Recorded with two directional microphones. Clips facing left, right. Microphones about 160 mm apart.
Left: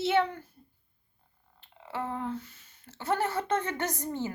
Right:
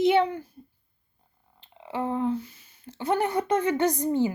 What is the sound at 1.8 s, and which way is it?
Speech, 15° right (ahead or behind).